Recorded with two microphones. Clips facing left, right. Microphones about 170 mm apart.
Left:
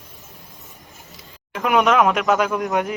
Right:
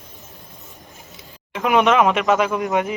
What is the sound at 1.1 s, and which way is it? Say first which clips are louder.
Speech: even; centre (ahead or behind).